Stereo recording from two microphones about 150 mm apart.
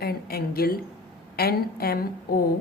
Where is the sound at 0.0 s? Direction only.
90° left.